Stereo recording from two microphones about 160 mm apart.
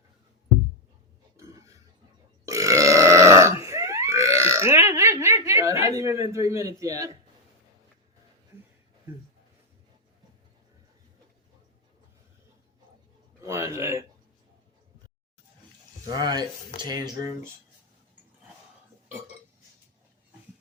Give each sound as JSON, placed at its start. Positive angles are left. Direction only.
{"t": 1.4, "sound": "burping", "side_deg": -20}
{"t": 13.4, "sound": "a man's voice", "side_deg": -15}
{"t": 16.0, "sound": "speech", "side_deg": -25}